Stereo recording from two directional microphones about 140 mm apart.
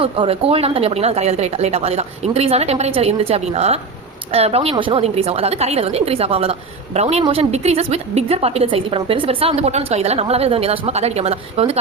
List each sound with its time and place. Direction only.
0.0 s a woman's voice: 40° right (ahead or behind)